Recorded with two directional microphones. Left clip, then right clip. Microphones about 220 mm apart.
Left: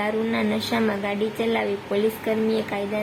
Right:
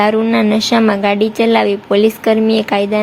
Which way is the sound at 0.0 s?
30° right (ahead or behind).